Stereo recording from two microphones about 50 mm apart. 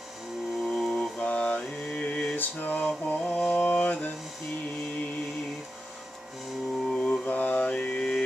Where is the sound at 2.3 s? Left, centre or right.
Left.